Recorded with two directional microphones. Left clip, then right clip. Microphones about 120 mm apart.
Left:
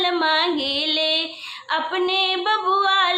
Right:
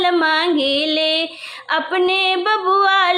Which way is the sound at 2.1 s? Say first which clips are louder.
Right 3 dB; 35° right (ahead or behind).